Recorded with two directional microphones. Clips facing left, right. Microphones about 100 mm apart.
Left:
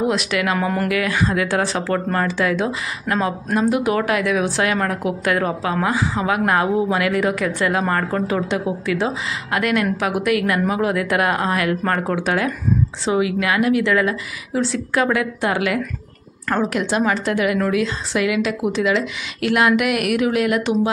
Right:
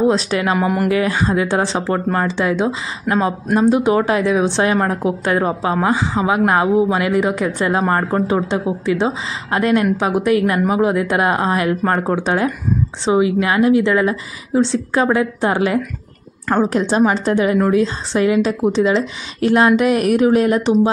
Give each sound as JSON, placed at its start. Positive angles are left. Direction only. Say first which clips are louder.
{"t": 0.0, "sound": "a woman's voice", "louder": "right 4 dB", "side_deg": -30}
{"t": 0.6, "sound": "speech", "louder": "right 3 dB", "side_deg": -10}
{"t": 0.8, "sound": "a woman's voice", "louder": "right 3 dB", "side_deg": -30}